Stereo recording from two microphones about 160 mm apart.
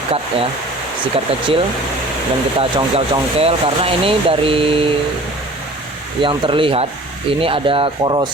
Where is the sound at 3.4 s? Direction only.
35° right (ahead or behind).